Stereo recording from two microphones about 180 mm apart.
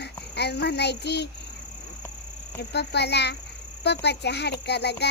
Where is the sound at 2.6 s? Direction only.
65° left (ahead or behind).